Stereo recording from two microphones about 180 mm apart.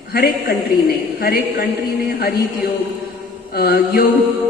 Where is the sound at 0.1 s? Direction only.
60° left (ahead or behind).